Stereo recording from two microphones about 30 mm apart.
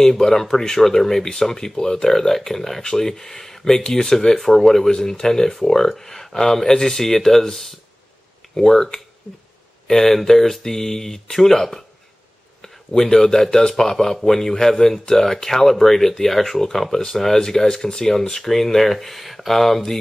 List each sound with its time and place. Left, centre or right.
0.0 s speech: centre
8.5 s speech: centre
9.8 s speech: centre